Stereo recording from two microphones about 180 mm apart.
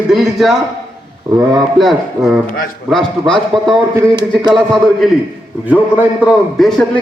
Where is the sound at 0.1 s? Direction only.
Centre (ahead or behind).